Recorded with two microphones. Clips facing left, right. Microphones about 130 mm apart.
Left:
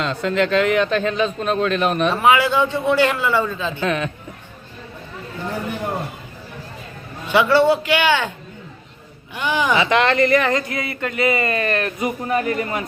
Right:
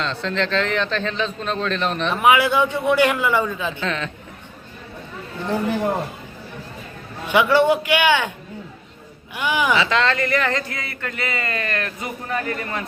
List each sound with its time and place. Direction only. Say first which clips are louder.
0.0 s a man's voice: left 4 dB; 10° left (ahead or behind)
2.2 s a man's voice: right 1 dB; 15° right (ahead or behind)
3.8 s a man's voice: left 4 dB; 10° left (ahead or behind)
7.3 s a man's voice: left 1 dB; 15° right (ahead or behind)
9.3 s a man's voice: left 1 dB; 10° right (ahead or behind)
9.7 s speech: left 3 dB; 20° left (ahead or behind)